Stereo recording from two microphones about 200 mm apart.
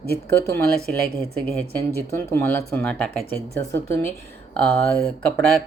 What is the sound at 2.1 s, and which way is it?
Speech, 10° left (ahead or behind).